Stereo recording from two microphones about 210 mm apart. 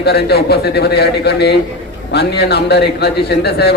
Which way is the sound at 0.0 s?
50° left (ahead or behind).